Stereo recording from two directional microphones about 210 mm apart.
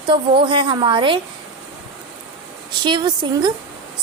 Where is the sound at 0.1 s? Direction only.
25° right (ahead or behind).